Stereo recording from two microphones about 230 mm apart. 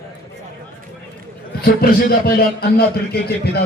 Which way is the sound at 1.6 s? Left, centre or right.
Left.